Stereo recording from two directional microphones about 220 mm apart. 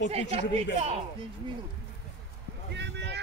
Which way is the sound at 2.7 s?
50° right (ahead or behind).